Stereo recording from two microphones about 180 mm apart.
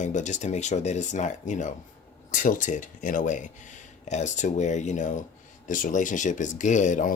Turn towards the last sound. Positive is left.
turn(degrees=45)  # may be behind; listen again after turning